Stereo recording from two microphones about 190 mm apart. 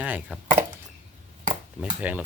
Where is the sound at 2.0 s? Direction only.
10° right (ahead or behind).